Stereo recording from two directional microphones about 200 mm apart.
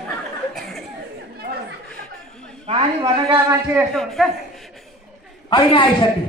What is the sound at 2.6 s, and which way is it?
Speech, 30° right (ahead or behind).